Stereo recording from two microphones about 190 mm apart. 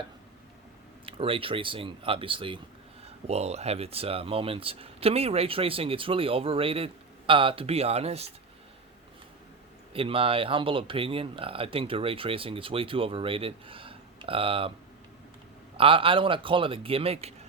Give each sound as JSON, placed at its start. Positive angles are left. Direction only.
{"t": 1.0, "sound": "speech", "side_deg": -30}
{"t": 9.9, "sound": "speech", "side_deg": -30}
{"t": 15.8, "sound": "speech", "side_deg": -30}